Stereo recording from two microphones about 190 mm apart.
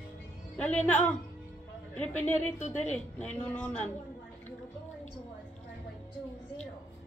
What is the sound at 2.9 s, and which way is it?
Speech, 10° left (ahead or behind).